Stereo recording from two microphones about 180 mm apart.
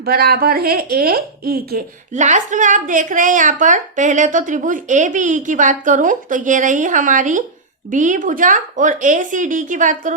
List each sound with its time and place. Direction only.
0.0 s speech: 60° right (ahead or behind)